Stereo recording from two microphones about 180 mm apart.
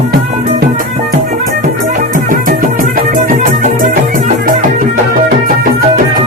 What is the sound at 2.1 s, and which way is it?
Music, 50° right (ahead or behind).